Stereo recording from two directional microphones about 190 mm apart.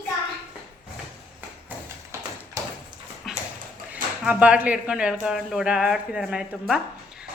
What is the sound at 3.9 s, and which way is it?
A woman's voice, 5° right (ahead or behind).